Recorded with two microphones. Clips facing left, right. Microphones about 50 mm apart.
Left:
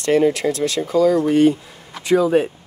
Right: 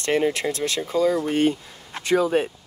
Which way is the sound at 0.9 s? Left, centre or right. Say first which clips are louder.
Left 6 dB; left.